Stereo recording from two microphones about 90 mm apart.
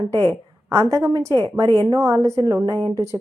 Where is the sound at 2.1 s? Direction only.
35° right (ahead or behind).